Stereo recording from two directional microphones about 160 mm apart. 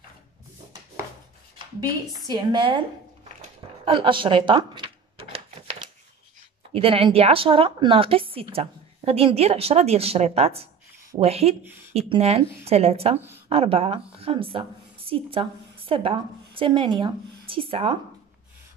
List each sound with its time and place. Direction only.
2.3 s a woman's voice: 30° right (ahead or behind)
3.8 s a woman's voice: 30° right (ahead or behind)
6.7 s a woman's voice: 35° right (ahead or behind)